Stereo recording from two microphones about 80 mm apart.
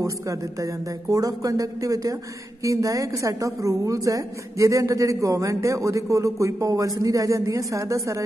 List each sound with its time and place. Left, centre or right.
0.0 s a woman's voice: right